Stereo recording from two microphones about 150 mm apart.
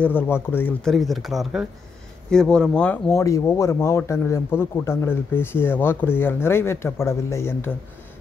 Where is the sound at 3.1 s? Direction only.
20° left (ahead or behind).